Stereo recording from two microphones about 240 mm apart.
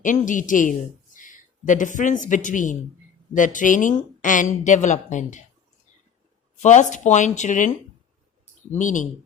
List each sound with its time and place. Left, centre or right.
0.0 s speech: left
6.6 s speech: left
8.7 s speech: left